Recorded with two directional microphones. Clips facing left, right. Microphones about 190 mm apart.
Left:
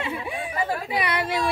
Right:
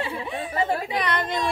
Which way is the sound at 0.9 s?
10° left (ahead or behind).